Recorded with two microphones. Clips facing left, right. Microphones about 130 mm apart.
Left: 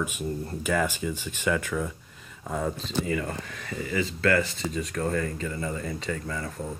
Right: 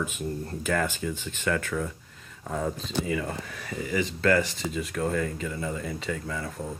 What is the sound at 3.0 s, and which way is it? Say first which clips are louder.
Speech: even; 10° right (ahead or behind).